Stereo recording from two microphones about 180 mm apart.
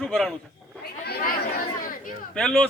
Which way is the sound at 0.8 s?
60° left (ahead or behind).